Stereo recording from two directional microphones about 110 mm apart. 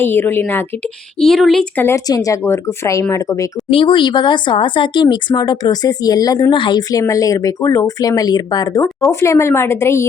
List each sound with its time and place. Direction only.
0.0 s speech: 20° left (ahead or behind)
1.2 s speech: centre (ahead or behind)
1.7 s a woman's voice: 20° left (ahead or behind)
2.0 s speech: 35° left (ahead or behind)
3.7 s speech: 55° left (ahead or behind); by 10.1 s 25° left (ahead or behind)